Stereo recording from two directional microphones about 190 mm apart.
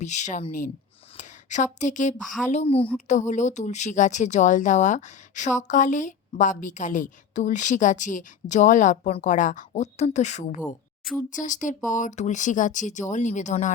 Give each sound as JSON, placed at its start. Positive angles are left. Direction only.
{"t": 0.0, "sound": "a woman's voice", "side_deg": 40}
{"t": 3.1, "sound": "speech", "side_deg": 40}